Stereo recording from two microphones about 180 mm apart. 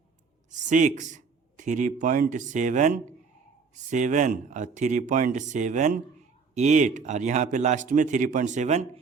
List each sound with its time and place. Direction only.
0.5 s speech: 45° right (ahead or behind)